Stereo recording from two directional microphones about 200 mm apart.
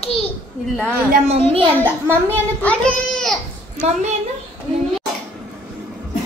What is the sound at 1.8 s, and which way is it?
Speech, 10° right (ahead or behind).